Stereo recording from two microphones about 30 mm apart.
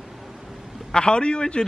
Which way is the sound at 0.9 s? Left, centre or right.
Left.